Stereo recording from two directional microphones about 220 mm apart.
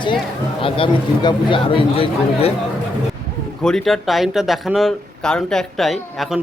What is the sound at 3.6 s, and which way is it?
Speech, centre (ahead or behind).